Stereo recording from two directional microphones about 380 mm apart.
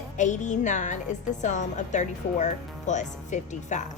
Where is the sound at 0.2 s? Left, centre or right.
Centre.